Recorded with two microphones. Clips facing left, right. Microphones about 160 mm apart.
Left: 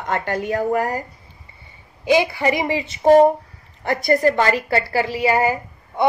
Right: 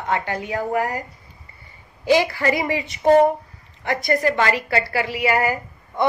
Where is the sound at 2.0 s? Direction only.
15° left (ahead or behind).